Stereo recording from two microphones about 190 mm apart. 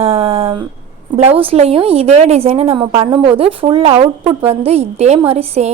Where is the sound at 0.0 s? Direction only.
30° right (ahead or behind).